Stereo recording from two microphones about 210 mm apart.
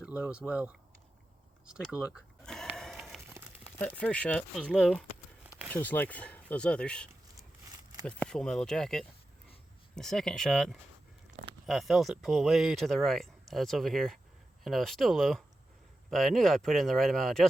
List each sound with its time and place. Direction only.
0.0 s speech: 5° right (ahead or behind)
1.6 s sheep: 5° right (ahead or behind)
3.8 s speech: 10° left (ahead or behind)